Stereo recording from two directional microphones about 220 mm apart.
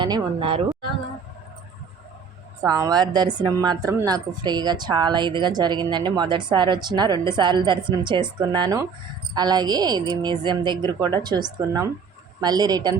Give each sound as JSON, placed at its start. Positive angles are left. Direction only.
{"t": 0.0, "sound": "speech", "side_deg": -20}
{"t": 2.6, "sound": "a woman's voice", "side_deg": -15}